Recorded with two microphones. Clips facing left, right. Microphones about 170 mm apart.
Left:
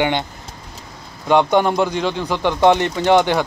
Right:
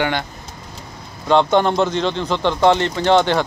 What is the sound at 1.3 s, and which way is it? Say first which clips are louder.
Speech: even; 10° left (ahead or behind).